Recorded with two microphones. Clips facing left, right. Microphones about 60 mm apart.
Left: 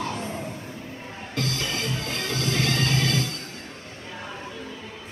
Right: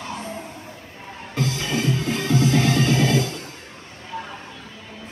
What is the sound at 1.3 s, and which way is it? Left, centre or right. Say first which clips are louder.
Music: right 4 dB; right.